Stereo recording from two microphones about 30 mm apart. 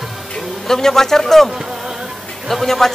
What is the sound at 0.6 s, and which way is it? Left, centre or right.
Speech, centre.